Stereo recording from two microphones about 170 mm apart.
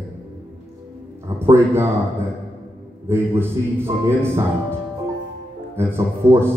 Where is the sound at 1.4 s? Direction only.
15° right (ahead or behind).